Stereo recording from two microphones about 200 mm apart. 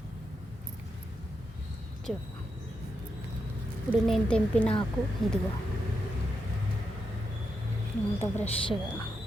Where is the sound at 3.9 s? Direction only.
5° left (ahead or behind).